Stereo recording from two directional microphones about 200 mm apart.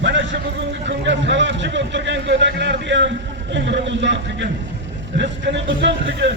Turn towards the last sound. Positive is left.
turn(degrees=-60)  # may be behind; listen again after turning